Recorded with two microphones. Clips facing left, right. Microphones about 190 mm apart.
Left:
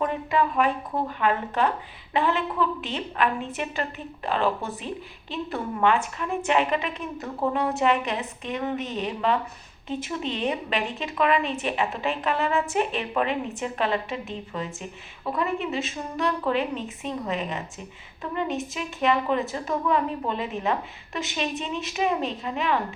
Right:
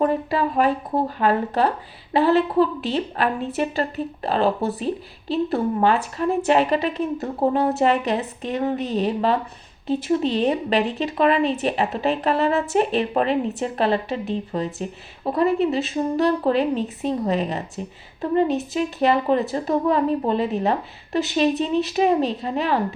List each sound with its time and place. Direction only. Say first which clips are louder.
0.0 s speech: right 4 dB; 35° right (ahead or behind)